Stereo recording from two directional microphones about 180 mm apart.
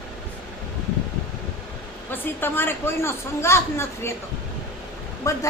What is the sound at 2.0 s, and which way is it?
A man's voice, 10° left (ahead or behind).